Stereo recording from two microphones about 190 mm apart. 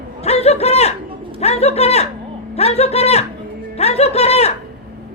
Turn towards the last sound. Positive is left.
turn(degrees=35)  # may be behind; listen again after turning